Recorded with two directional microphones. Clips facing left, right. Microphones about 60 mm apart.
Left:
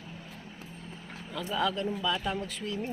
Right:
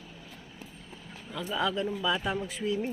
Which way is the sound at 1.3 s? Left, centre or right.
Centre.